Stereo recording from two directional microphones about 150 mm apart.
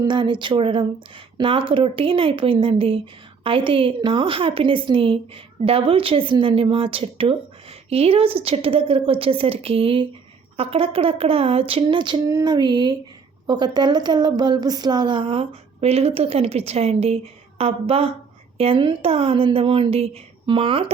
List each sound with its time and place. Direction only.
0.0 s speech: 30° right (ahead or behind)